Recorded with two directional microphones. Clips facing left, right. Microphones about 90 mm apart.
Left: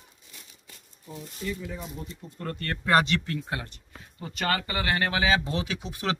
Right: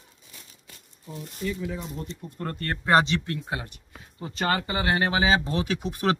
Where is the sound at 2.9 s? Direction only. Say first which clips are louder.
Right 2 dB; 20° right (ahead or behind).